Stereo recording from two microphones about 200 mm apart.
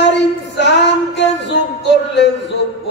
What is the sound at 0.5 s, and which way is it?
Music, 60° left (ahead or behind).